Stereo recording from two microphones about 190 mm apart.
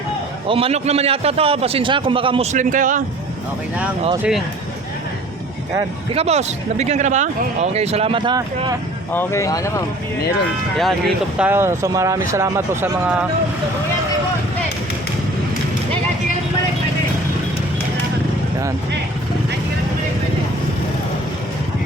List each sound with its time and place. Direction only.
0.4 s a man's voice: 30° right (ahead or behind)
4.2 s speech: centre (ahead or behind)
6.1 s a man's voice: 35° right (ahead or behind)
9.1 s speech: 15° left (ahead or behind)
10.8 s speech: centre (ahead or behind)